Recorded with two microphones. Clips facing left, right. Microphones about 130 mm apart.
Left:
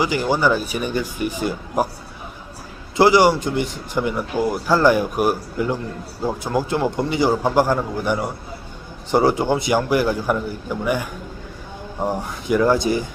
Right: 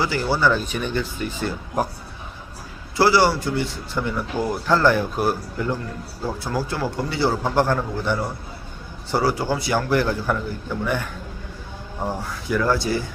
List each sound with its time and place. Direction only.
0.0 s a man's voice: 15° left (ahead or behind)
3.0 s a man's voice: 15° left (ahead or behind)